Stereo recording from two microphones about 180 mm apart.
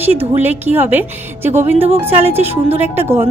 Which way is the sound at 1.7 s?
35° right (ahead or behind).